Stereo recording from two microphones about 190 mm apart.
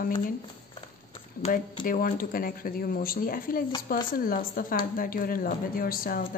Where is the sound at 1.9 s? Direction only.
50° left (ahead or behind).